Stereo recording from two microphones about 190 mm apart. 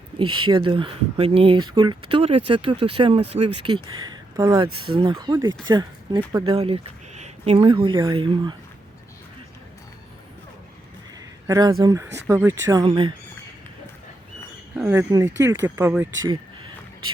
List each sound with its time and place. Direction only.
0.2 s speech: 25° right (ahead or behind)
11.4 s speech: 20° right (ahead or behind)
14.8 s speech: 10° right (ahead or behind)